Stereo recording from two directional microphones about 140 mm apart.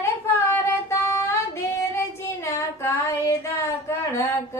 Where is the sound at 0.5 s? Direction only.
15° left (ahead or behind).